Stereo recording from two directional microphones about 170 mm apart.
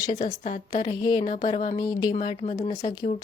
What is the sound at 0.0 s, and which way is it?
Speech, 25° left (ahead or behind).